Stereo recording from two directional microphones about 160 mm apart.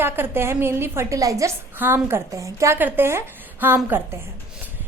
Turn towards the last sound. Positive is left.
turn(degrees=-15)  # may be behind; listen again after turning